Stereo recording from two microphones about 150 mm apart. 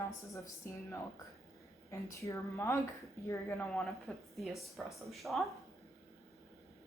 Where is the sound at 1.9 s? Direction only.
20° left (ahead or behind).